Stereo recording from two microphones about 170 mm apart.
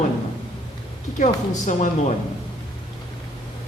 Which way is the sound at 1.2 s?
45° left (ahead or behind).